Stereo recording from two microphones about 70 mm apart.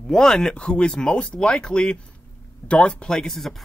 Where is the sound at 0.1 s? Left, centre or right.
Centre.